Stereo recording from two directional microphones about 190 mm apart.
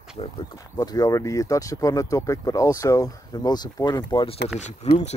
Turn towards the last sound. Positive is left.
turn(degrees=35)  # may be behind; listen again after turning